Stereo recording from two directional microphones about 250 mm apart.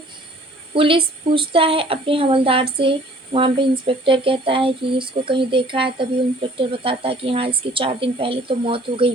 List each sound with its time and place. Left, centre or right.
0.7 s a woman's voice: right